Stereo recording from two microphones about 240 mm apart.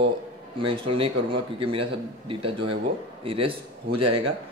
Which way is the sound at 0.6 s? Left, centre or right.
Right.